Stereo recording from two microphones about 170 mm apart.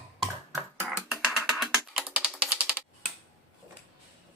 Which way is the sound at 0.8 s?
5° right (ahead or behind).